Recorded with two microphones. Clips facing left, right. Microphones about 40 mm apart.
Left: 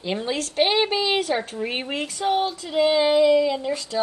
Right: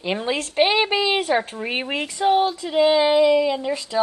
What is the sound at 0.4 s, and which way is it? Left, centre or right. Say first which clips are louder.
Speech: right 2 dB; right.